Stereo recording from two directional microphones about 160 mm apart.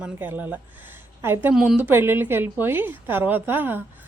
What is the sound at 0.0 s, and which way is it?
Speech, 10° right (ahead or behind).